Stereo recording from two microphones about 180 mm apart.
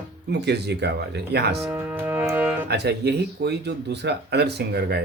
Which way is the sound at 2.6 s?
65° right (ahead or behind).